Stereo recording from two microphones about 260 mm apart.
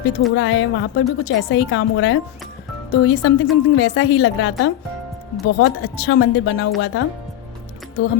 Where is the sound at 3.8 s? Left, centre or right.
Left.